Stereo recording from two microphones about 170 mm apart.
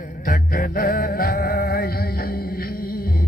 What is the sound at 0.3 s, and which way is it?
Music, 55° left (ahead or behind).